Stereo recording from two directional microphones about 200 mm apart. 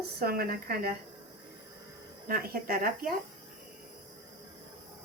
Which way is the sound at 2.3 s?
50° right (ahead or behind).